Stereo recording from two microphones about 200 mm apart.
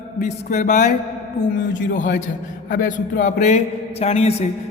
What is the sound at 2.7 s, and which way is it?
A man's voice, 40° left (ahead or behind).